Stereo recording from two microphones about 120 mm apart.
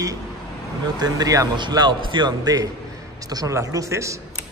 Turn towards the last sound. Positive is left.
turn(degrees=-25)  # may be behind; listen again after turning